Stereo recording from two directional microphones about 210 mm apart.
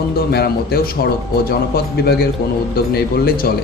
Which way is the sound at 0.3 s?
50° left (ahead or behind).